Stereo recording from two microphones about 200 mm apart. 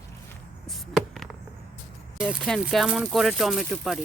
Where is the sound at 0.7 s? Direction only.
Centre (ahead or behind).